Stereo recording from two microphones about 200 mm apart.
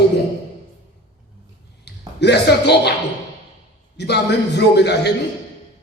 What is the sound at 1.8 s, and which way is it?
Speech, 55° left (ahead or behind).